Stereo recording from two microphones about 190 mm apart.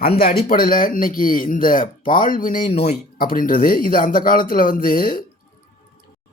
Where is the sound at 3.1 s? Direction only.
50° left (ahead or behind).